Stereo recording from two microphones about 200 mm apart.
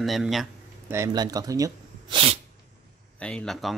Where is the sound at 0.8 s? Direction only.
15° right (ahead or behind).